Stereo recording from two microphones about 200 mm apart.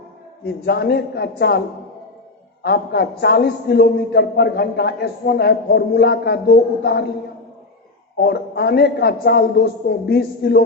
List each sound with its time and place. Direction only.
0.4 s a man's voice: 55° left (ahead or behind)
2.6 s a man's voice: 50° left (ahead or behind)
8.2 s a man's voice: 55° left (ahead or behind)